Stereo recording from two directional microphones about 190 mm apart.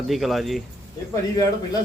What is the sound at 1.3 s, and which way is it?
Speech, 20° left (ahead or behind).